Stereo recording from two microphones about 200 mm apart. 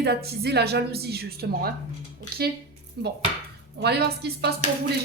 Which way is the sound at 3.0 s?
55° right (ahead or behind).